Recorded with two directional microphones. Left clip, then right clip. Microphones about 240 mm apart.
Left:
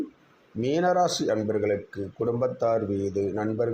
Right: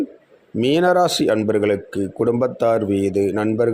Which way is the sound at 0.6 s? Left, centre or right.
Right.